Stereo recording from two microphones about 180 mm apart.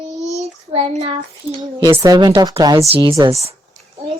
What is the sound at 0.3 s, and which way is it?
Child singing, 35° right (ahead or behind).